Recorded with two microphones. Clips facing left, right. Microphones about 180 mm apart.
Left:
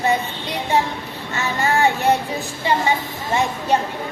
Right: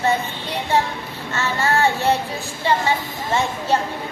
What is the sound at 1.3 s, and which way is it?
Child singing, 15° left (ahead or behind).